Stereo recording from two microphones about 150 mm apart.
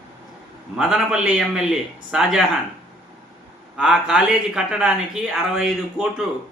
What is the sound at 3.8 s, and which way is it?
A man's voice, 5° right (ahead or behind).